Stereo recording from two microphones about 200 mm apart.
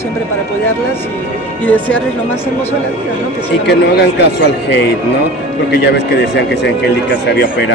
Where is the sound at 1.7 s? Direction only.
5° left (ahead or behind).